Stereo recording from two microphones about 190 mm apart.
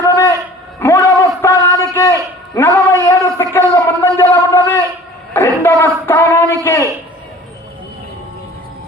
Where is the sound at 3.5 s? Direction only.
15° left (ahead or behind).